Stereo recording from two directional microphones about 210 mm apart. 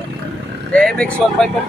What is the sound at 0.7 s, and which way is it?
Speech, 5° left (ahead or behind).